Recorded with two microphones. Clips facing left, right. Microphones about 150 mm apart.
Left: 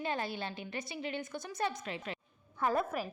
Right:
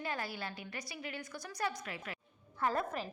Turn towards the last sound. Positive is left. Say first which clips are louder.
# left 3 dB
turn(degrees=10)  # may be behind; listen again after turning